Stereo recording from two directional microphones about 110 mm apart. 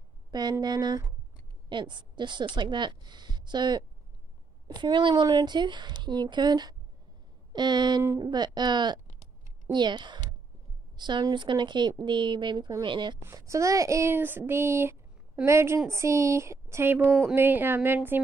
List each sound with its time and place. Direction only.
0.3 s a woman's voice: 40° right (ahead or behind)
1.7 s a woman's voice: 45° right (ahead or behind)
13.2 s speech: 25° right (ahead or behind)